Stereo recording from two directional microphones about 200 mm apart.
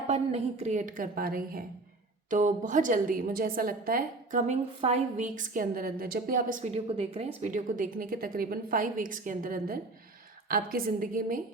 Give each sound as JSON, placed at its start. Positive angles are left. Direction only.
{"t": 0.1, "sound": "a woman's voice", "side_deg": -35}